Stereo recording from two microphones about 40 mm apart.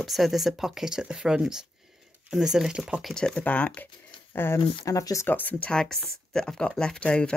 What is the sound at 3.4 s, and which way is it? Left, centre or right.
Speech, left.